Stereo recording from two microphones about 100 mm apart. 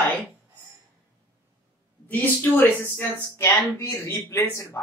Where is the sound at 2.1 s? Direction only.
20° left (ahead or behind).